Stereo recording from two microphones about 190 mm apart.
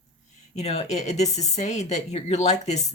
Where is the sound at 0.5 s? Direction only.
35° left (ahead or behind).